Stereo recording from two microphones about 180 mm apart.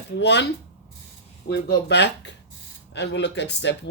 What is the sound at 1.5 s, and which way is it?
Speech, 70° left (ahead or behind).